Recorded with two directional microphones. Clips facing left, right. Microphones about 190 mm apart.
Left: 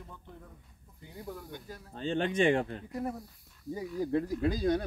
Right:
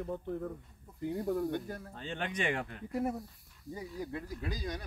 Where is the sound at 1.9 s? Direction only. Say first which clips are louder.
Left 10 dB; 30° left (ahead or behind).